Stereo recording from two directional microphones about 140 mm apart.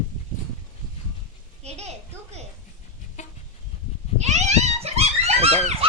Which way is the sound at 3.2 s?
55° left (ahead or behind).